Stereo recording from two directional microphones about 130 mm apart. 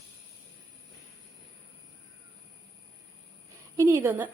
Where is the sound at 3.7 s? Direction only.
20° right (ahead or behind).